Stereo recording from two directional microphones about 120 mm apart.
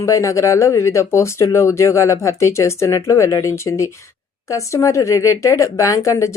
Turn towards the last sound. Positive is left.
turn(degrees=25)  # may be behind; listen again after turning